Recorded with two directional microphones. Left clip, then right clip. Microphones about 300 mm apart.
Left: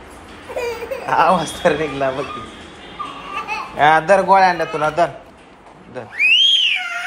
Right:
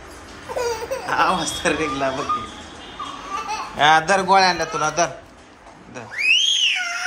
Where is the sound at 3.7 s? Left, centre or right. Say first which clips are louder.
Left 3 dB; centre.